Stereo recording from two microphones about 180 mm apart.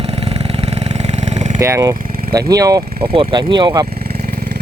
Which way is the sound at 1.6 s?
15° right (ahead or behind).